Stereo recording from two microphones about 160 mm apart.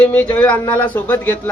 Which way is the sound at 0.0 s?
10° left (ahead or behind).